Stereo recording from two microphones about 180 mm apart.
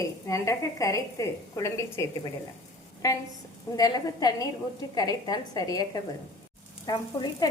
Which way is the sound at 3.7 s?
20° left (ahead or behind).